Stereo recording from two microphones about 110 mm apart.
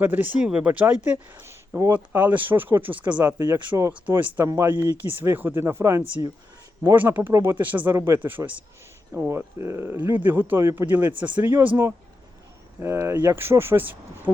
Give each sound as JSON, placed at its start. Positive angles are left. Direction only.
{"t": 0.0, "sound": "speech", "side_deg": -15}
{"t": 3.2, "sound": "speech", "side_deg": -30}